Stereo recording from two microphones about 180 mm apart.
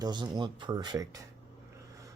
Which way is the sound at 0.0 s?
25° right (ahead or behind).